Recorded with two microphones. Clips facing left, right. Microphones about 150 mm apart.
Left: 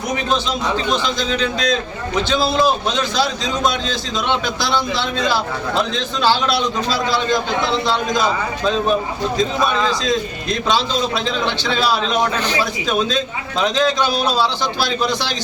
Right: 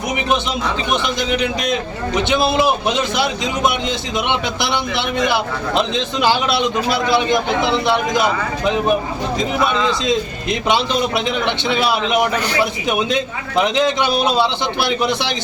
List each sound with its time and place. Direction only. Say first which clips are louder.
0.3 s a man's voice: right 1 dB; 20° right (ahead or behind)